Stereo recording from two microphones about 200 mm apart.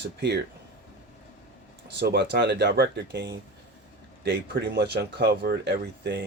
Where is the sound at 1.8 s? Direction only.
55° right (ahead or behind).